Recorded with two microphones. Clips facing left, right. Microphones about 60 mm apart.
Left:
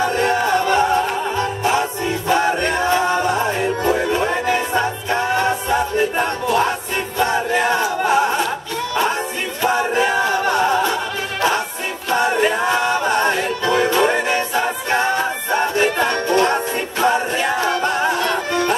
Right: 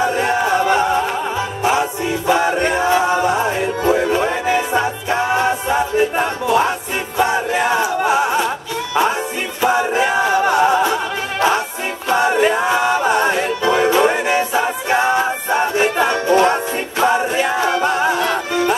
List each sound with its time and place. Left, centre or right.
0.0 s music: centre
9.6 s music: centre
12.1 s music: centre